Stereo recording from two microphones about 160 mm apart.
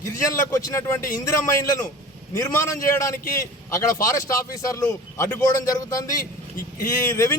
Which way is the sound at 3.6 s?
20° left (ahead or behind).